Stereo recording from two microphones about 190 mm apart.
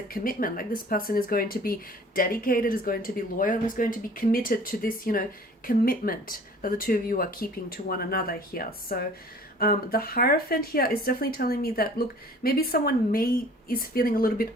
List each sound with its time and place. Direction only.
0.1 s speech: 50° left (ahead or behind)